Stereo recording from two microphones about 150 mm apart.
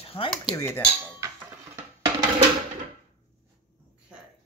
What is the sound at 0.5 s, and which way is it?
Dishes, 15° left (ahead or behind).